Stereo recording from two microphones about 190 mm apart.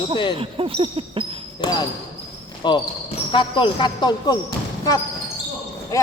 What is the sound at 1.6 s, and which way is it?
Speech, 25° left (ahead or behind).